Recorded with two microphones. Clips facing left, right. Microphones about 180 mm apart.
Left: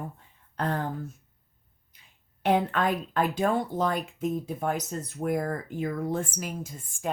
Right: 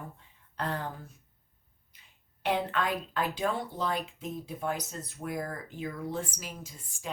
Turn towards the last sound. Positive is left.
turn(degrees=50)  # may be behind; listen again after turning